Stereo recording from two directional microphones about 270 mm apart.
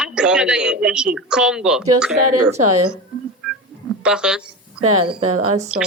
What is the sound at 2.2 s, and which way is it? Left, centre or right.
Speech, right.